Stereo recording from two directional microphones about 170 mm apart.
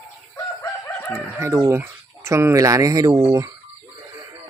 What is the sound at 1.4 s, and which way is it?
Speech, 15° right (ahead or behind).